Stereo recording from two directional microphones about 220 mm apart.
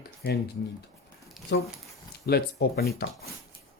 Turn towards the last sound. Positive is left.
turn(degrees=45)  # may be behind; listen again after turning